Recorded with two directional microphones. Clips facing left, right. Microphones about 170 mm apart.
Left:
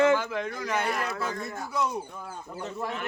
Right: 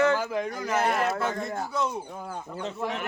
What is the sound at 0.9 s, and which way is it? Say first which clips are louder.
Speech: right 5 dB; 60° right (ahead or behind).